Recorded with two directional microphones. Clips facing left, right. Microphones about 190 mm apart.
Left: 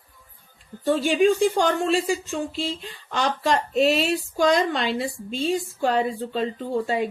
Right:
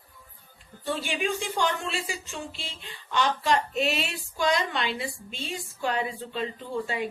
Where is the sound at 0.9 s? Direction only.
40° left (ahead or behind).